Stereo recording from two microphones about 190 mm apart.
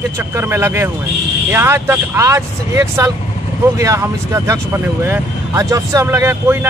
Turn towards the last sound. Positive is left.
turn(degrees=-10)  # may be behind; listen again after turning